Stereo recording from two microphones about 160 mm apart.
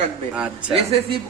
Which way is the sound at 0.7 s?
35° right (ahead or behind).